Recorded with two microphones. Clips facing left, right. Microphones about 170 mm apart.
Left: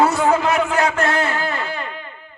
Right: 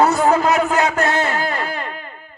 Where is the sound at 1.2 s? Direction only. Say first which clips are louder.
Right 1 dB; 40° right (ahead or behind).